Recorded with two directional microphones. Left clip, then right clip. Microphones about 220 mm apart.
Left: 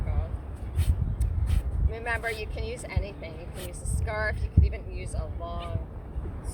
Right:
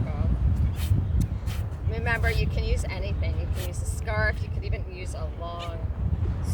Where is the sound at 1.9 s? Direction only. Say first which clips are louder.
Right 3 dB; centre (ahead or behind).